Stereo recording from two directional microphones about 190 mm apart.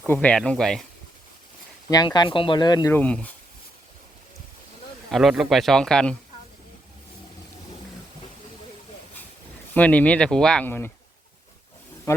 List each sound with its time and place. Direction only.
0.0 s speech: 5° left (ahead or behind)
1.9 s speech: 20° left (ahead or behind)
2.9 s speech: 5° left (ahead or behind)
5.1 s speech: centre (ahead or behind)
9.7 s speech: 5° left (ahead or behind)